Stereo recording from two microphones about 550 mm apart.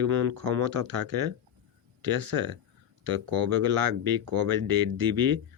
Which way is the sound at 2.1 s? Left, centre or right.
Right.